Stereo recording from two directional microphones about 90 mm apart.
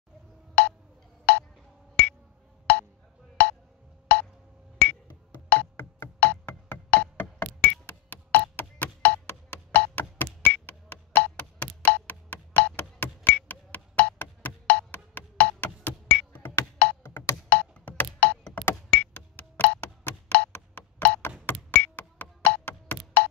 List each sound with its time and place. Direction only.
0.6 s tick: 15° left (ahead or behind)
2.0 s a sound: 15° left (ahead or behind)
4.1 s wood block: 15° left (ahead or behind)
4.7 s music: 20° left (ahead or behind)
11.3 s a sound: 15° left (ahead or behind)
17.0 s music: 25° left (ahead or behind)
17.5 s a sound: 15° left (ahead or behind)
18.7 s wood block: 20° left (ahead or behind)
21.5 s music: 20° left (ahead or behind)